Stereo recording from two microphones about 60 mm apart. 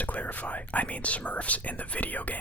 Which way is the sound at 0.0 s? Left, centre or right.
Left.